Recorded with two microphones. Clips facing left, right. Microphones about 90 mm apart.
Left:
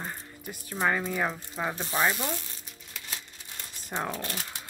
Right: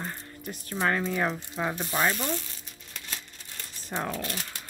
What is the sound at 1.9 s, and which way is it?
Speech, 15° left (ahead or behind).